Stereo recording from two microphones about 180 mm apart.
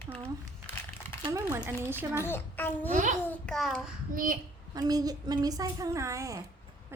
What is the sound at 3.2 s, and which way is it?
Speech, 10° left (ahead or behind).